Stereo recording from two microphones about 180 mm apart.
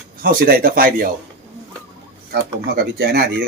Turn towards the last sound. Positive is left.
turn(degrees=-60)  # may be behind; listen again after turning